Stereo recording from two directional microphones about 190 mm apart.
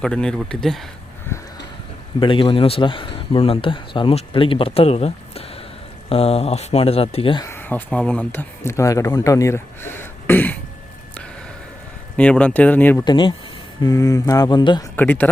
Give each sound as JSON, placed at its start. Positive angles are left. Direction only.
{"t": 0.0, "sound": "speech", "side_deg": 5}
{"t": 1.3, "sound": "a sound", "side_deg": 10}
{"t": 2.2, "sound": "speech", "side_deg": 25}
{"t": 7.4, "sound": "speech", "side_deg": 10}
{"t": 12.1, "sound": "speech", "side_deg": 5}
{"t": 13.1, "sound": "speech", "side_deg": 25}
{"t": 14.9, "sound": "speech", "side_deg": 10}